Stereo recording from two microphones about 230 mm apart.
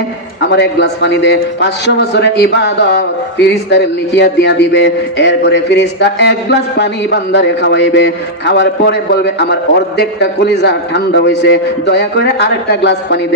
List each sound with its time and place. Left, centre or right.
0.5 s a man's voice: left